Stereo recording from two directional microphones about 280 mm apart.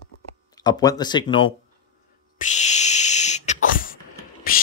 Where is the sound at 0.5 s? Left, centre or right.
Centre.